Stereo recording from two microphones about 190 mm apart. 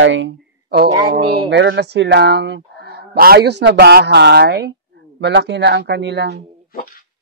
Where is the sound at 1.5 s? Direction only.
65° right (ahead or behind).